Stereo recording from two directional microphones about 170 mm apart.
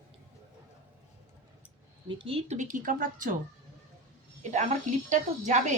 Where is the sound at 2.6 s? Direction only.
50° right (ahead or behind).